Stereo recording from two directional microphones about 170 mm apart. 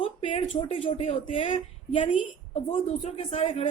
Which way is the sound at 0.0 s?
35° left (ahead or behind).